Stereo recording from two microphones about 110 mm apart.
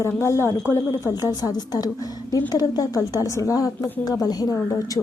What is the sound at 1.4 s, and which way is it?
A woman's voice, 35° left (ahead or behind).